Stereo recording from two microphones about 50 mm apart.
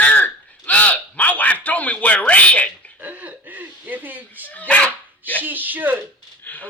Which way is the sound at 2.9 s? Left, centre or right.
Right.